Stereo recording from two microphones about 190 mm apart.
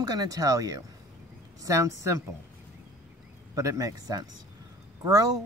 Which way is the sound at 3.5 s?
15° right (ahead or behind).